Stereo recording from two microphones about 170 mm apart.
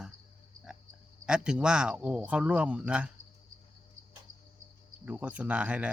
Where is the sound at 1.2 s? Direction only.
5° right (ahead or behind).